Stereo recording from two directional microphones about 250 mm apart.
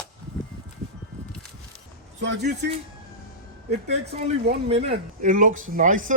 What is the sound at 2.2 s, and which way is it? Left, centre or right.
Speech, right.